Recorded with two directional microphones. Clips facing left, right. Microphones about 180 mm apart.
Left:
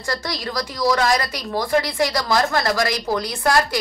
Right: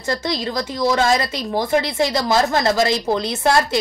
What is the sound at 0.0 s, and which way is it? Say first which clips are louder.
A woman's voice: right 4 dB; 25° right (ahead or behind).